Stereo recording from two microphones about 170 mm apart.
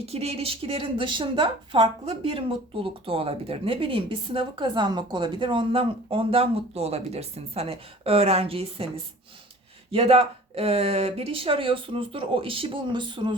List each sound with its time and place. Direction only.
0.0 s a woman's voice: 35° right (ahead or behind)
9.9 s a woman's voice: 35° right (ahead or behind)